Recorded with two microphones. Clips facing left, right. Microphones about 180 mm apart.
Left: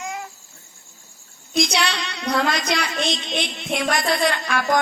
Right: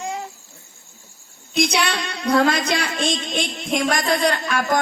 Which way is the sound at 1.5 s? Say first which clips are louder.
Right 1 dB; 55° right (ahead or behind).